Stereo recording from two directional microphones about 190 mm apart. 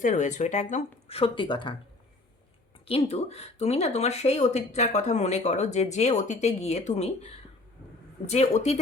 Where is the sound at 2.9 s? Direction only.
30° left (ahead or behind).